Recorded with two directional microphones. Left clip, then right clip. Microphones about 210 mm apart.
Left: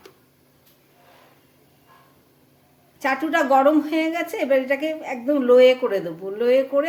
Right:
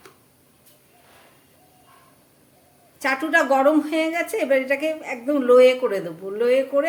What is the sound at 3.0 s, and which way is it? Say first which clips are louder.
A woman's voice: right 1 dB; centre (ahead or behind).